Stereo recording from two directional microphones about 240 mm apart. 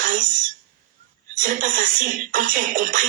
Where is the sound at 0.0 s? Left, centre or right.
Right.